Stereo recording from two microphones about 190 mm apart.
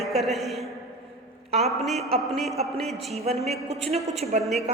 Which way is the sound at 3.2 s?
35° right (ahead or behind).